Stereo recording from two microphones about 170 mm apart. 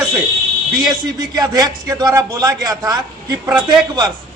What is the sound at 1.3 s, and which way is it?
A man's voice, 25° right (ahead or behind).